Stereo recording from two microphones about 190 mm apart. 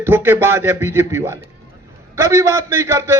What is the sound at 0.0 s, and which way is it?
A man's voice, 10° right (ahead or behind).